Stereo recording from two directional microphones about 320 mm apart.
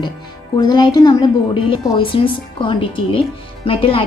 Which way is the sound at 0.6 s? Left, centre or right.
Centre.